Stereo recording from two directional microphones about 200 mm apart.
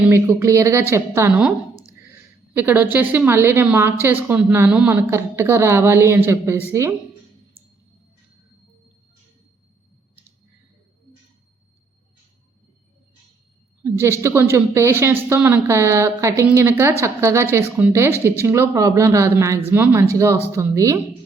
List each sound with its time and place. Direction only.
0.1 s speech: 15° right (ahead or behind)
2.6 s speech: 10° right (ahead or behind)
13.8 s speech: 15° right (ahead or behind)